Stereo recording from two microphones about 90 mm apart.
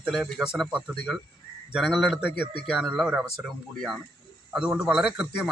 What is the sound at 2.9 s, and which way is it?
A man's voice, 10° right (ahead or behind).